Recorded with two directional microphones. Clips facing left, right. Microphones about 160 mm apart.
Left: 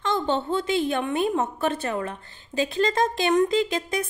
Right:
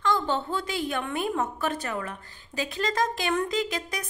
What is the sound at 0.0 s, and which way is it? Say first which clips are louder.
A woman's voice: left 2 dB; 25° left (ahead or behind).